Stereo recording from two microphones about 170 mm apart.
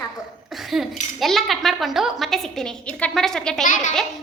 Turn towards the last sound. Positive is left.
turn(degrees=50)  # may be behind; listen again after turning